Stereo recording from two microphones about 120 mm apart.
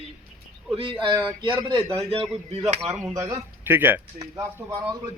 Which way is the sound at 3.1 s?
30° right (ahead or behind).